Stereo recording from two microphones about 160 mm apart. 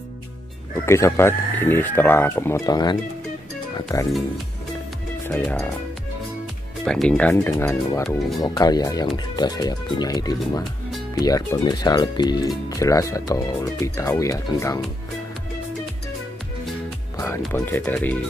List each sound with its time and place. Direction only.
0.8 s speech: 15° left (ahead or behind)
5.2 s speech: 10° left (ahead or behind)
6.8 s speech: 5° left (ahead or behind); by 14.8 s 20° left (ahead or behind)
17.5 s speech: 15° left (ahead or behind)